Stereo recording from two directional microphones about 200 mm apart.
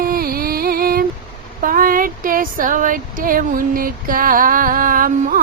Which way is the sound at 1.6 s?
45° right (ahead or behind).